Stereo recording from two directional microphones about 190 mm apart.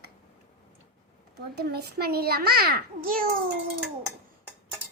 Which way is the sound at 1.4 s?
55° right (ahead or behind).